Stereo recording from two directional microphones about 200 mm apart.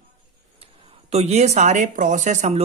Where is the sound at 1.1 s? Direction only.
35° right (ahead or behind).